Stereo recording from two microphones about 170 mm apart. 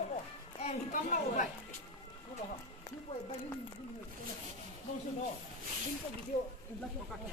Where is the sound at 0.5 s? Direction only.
45° left (ahead or behind).